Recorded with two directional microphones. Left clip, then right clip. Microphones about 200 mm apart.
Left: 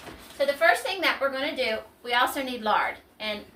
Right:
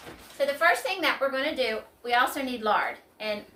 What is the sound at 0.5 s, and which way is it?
A woman's voice, 5° right (ahead or behind).